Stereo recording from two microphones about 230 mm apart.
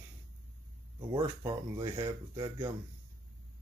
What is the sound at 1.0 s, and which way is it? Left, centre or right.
Speech, centre.